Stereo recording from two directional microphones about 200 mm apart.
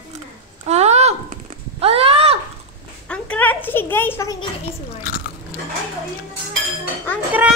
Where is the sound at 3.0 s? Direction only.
5° left (ahead or behind).